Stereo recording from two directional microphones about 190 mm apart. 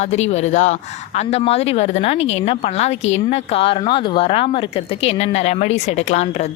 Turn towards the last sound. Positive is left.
turn(degrees=35)  # may be behind; listen again after turning